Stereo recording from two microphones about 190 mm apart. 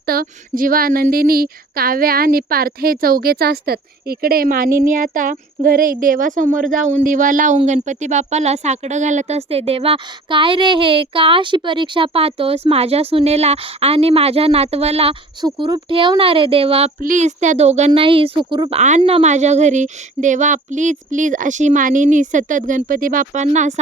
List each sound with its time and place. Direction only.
0.0 s speech: 50° right (ahead or behind); by 16.9 s 30° right (ahead or behind)
17.0 s speech: 40° right (ahead or behind); by 18.8 s 25° right (ahead or behind)
18.8 s speech: 35° right (ahead or behind)